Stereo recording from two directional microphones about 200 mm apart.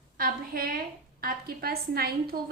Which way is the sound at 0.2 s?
45° right (ahead or behind).